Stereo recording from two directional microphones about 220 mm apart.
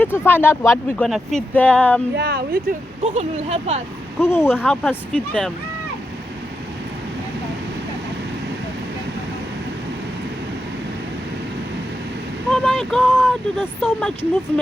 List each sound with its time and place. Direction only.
0.0 s speech: 10° left (ahead or behind)
1.0 s speech: centre (ahead or behind)
2.1 s speech: 45° right (ahead or behind)
3.0 s speech: 30° right (ahead or behind)
4.2 s speech: 10° left (ahead or behind)
12.5 s speech: centre (ahead or behind)